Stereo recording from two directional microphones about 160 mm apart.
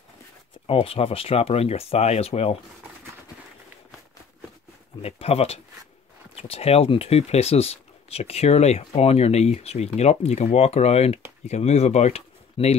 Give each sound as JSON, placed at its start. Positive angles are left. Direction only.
{"t": 0.7, "sound": "speech", "side_deg": 35}
{"t": 5.0, "sound": "speech", "side_deg": 40}